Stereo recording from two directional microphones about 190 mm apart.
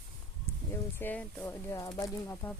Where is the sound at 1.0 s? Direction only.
10° left (ahead or behind).